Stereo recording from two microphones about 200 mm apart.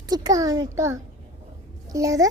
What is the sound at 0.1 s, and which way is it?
A child's voice, 20° right (ahead or behind).